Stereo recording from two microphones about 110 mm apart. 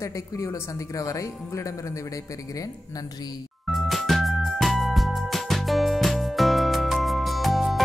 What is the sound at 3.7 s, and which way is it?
Music, centre (ahead or behind).